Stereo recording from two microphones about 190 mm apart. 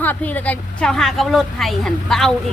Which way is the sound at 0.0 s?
10° left (ahead or behind).